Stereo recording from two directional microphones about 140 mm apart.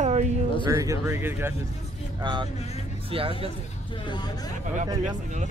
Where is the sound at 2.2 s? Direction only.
35° right (ahead or behind).